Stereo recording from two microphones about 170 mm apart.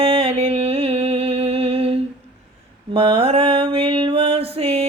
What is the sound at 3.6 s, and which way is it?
Music, 35° right (ahead or behind).